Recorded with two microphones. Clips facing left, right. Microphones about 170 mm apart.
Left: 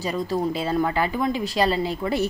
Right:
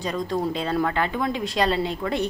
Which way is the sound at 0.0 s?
5° left (ahead or behind).